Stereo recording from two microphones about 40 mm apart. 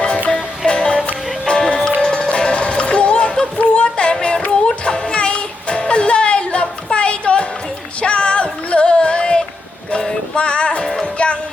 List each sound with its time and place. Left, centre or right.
0.3 s music: centre